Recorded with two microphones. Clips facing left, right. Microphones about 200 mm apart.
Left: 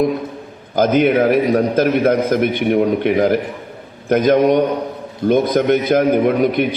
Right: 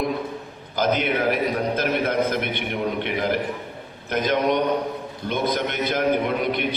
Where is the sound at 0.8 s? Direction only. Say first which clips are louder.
Left 9 dB; 50° left (ahead or behind).